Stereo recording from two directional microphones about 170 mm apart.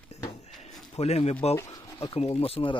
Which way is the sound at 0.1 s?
40° left (ahead or behind).